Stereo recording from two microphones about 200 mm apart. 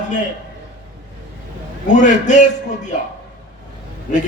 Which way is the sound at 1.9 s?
40° left (ahead or behind).